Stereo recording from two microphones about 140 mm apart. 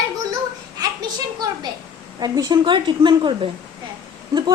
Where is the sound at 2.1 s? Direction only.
30° right (ahead or behind).